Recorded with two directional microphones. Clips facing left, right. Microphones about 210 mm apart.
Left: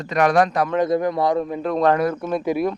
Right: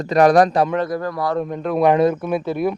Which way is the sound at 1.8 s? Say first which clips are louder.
Right 4 dB; 15° right (ahead or behind).